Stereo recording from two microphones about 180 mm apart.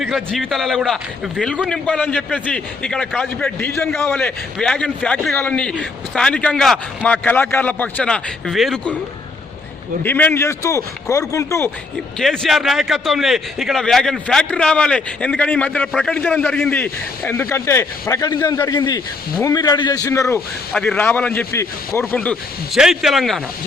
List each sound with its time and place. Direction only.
0.0 s speech: centre (ahead or behind)
10.0 s a man's voice: 10° left (ahead or behind)
12.2 s a man's voice: centre (ahead or behind)